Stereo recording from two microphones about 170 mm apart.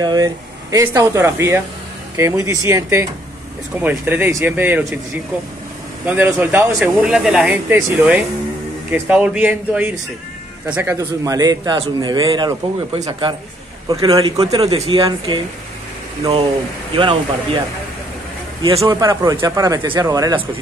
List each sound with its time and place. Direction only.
0.0 s speech: 20° right (ahead or behind)
6.0 s a man's voice: 10° right (ahead or behind)
14.4 s speech: 35° right (ahead or behind)
16.9 s speech: 30° right (ahead or behind)
18.9 s speech: 20° right (ahead or behind)